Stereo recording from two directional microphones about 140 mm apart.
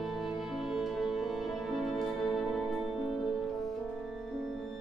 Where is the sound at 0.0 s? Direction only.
Centre (ahead or behind).